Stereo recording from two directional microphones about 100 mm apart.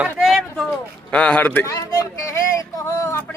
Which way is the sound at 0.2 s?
Centre (ahead or behind).